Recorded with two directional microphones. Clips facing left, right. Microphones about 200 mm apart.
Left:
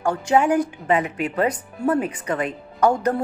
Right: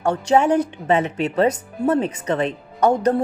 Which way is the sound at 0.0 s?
25° right (ahead or behind).